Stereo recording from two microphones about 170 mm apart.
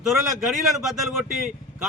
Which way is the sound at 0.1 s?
Centre (ahead or behind).